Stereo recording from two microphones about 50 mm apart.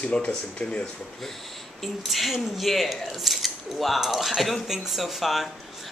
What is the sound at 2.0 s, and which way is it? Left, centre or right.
Speech, centre.